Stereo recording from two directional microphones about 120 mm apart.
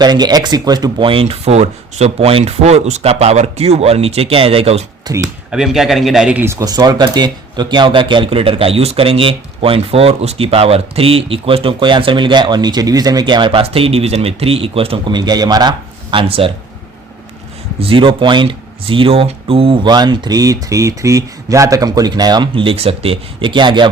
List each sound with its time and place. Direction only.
0.0 s speech: 35° right (ahead or behind); by 4.9 s 60° right (ahead or behind)
5.0 s speech: 35° right (ahead or behind)
5.5 s speech: 5° right (ahead or behind)
6.4 s speech: 25° right (ahead or behind); by 15.1 s 50° right (ahead or behind)
15.1 s speech: 35° right (ahead or behind)
16.1 s speech: 50° right (ahead or behind)
17.7 s speech: 50° right (ahead or behind)